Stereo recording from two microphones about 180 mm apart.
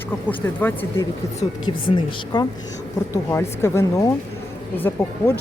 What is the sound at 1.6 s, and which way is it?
Speech, 25° left (ahead or behind).